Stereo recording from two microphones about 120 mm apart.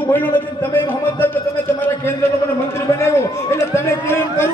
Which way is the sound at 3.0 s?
20° left (ahead or behind).